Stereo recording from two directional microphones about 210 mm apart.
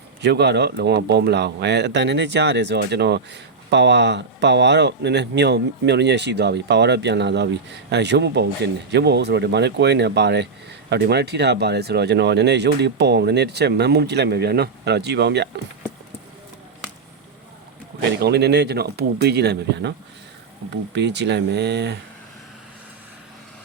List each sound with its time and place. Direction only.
0.2 s speech: 55° right (ahead or behind)
18.2 s speech: 55° right (ahead or behind)
20.9 s speech: 55° right (ahead or behind)